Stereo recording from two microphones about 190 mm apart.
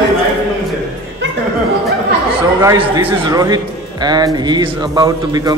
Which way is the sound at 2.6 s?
15° right (ahead or behind).